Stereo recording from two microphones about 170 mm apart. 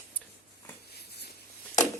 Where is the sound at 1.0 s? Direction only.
70° left (ahead or behind).